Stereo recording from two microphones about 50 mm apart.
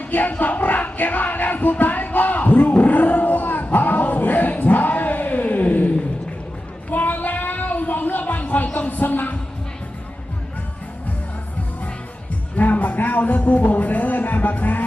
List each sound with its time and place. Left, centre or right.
0.0 s music: left
6.9 s a sound: left
12.5 s music: left